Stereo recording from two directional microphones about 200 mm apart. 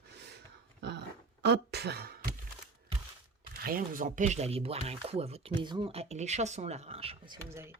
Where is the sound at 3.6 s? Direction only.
45° right (ahead or behind); by 7.3 s 30° right (ahead or behind).